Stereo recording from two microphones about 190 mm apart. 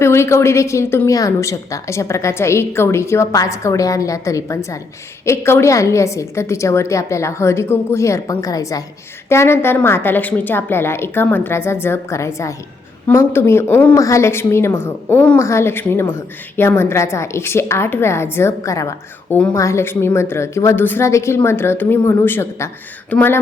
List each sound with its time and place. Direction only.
0.0 s a woman's voice: 15° left (ahead or behind)